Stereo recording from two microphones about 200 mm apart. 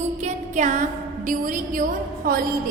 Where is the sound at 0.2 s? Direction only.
35° right (ahead or behind).